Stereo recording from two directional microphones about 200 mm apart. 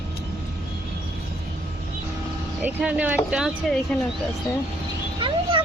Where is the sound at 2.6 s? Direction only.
5° right (ahead or behind).